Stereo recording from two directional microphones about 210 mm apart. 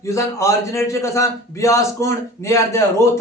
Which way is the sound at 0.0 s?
15° left (ahead or behind).